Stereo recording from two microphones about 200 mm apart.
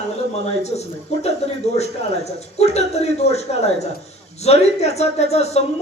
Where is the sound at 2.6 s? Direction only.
35° left (ahead or behind).